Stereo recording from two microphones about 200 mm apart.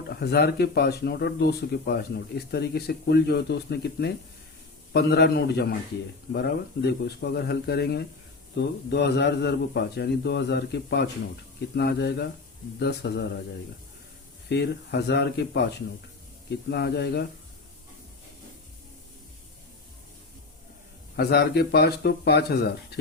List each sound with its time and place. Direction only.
0.1 s a man's voice: 55° left (ahead or behind)
14.5 s a man's voice: 60° left (ahead or behind)
16.6 s a man's voice: 55° left (ahead or behind)
21.2 s a man's voice: 55° left (ahead or behind)